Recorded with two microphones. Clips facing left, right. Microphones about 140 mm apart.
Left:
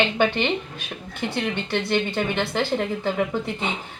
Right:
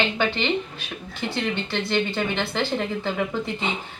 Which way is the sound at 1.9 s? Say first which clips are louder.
Even; 15° left (ahead or behind).